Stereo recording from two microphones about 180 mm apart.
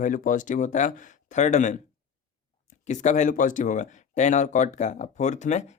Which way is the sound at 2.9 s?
40° left (ahead or behind).